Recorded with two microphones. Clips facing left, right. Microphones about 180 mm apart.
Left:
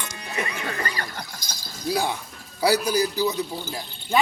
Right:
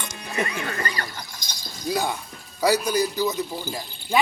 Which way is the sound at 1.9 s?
5° left (ahead or behind).